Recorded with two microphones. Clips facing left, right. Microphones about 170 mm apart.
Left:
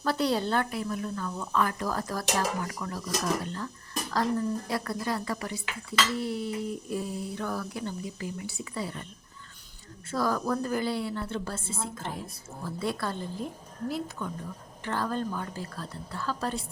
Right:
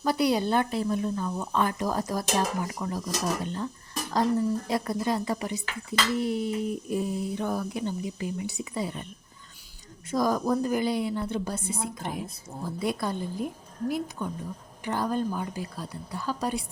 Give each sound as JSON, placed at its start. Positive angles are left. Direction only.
{"t": 0.0, "sound": "speech", "side_deg": -15}
{"t": 10.1, "sound": "a woman's voice", "side_deg": -15}